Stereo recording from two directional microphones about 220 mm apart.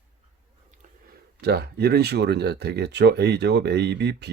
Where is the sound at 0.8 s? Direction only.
35° right (ahead or behind).